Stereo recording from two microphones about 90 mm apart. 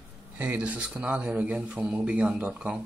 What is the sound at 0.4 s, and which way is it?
Speech, 15° right (ahead or behind).